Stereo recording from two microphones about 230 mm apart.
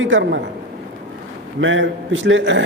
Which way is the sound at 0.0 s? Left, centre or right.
Right.